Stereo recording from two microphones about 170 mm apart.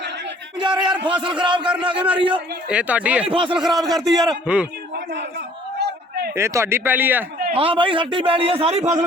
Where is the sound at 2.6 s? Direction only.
5° right (ahead or behind).